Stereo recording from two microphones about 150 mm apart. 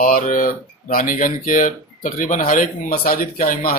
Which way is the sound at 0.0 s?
70° left (ahead or behind).